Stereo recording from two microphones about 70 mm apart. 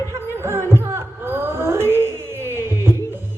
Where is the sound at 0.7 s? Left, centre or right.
Right.